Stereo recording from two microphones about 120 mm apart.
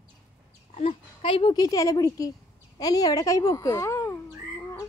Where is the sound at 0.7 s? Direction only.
55° left (ahead or behind).